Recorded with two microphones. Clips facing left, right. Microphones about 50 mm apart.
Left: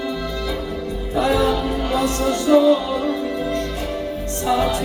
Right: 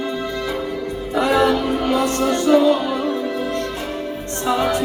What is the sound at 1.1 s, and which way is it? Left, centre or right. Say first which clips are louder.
Music: right 2 dB; right.